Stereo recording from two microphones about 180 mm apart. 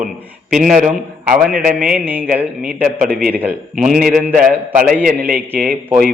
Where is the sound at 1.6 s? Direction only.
50° right (ahead or behind).